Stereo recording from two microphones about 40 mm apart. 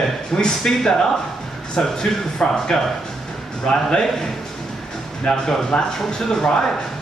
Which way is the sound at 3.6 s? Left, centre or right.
Left.